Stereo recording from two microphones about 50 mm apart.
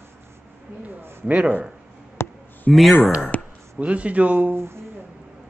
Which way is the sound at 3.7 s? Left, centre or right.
Right.